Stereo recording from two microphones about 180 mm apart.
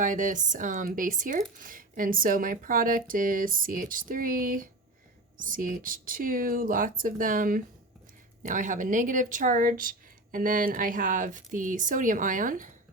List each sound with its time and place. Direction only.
0.0 s speech: 45° right (ahead or behind)